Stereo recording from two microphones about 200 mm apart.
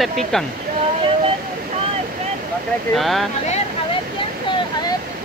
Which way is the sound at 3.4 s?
35° left (ahead or behind).